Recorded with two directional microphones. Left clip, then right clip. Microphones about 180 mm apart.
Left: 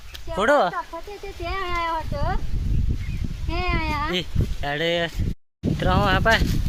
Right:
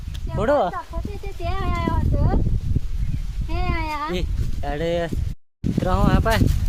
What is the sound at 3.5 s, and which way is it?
Speech, 45° left (ahead or behind).